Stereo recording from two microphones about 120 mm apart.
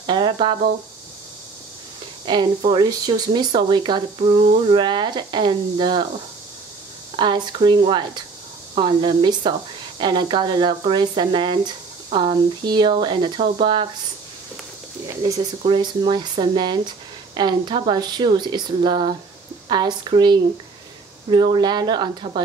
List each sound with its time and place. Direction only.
0.0 s a sound: 40° right (ahead or behind)
2.2 s speech: 40° right (ahead or behind)
4.6 s speech: 40° right (ahead or behind)
7.2 s speech: 40° right (ahead or behind)
15.6 s speech: 40° right (ahead or behind)